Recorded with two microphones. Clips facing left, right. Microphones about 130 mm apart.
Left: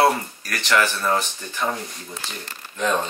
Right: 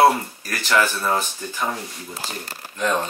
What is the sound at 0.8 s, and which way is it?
Speech, 15° right (ahead or behind).